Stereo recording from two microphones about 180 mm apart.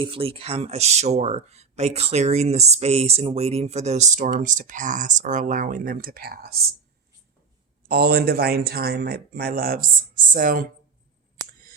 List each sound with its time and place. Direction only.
0.0 s speech: 30° right (ahead or behind); by 6.6 s 60° right (ahead or behind)
7.9 s speech: 55° right (ahead or behind)